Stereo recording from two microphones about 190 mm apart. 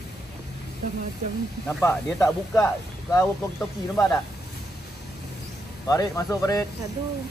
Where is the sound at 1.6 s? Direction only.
10° left (ahead or behind).